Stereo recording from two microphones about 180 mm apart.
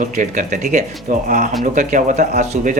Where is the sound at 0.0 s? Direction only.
45° right (ahead or behind).